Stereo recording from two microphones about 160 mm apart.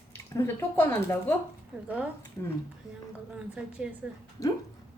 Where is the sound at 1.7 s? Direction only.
5° right (ahead or behind).